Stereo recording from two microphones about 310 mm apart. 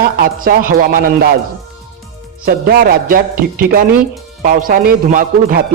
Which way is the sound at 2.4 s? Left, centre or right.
Right.